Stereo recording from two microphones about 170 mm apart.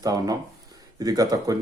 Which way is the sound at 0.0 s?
20° right (ahead or behind).